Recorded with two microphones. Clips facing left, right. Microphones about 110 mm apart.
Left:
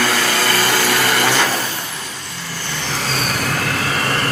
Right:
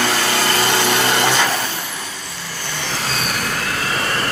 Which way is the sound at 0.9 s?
25° right (ahead or behind).